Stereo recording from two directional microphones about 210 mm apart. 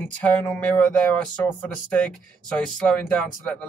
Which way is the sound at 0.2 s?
5° left (ahead or behind).